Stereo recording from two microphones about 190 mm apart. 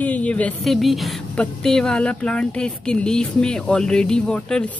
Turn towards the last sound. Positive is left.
turn(degrees=5)  # may be behind; listen again after turning